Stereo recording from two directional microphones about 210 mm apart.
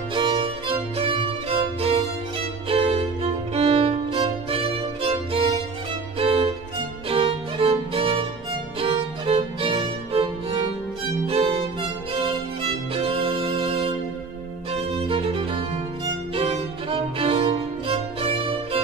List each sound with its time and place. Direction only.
0.1 s music: 25° right (ahead or behind)
2.7 s violin: 30° right (ahead or behind)
3.5 s music: 25° right (ahead or behind)
11.2 s violin: 25° right (ahead or behind)
12.1 s music: 25° right (ahead or behind)
16.3 s violin: 25° right (ahead or behind)